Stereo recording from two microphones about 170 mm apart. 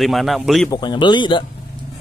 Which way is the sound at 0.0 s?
Centre (ahead or behind).